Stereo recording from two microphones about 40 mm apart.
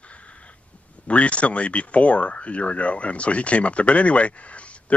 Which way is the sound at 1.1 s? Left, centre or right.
Left.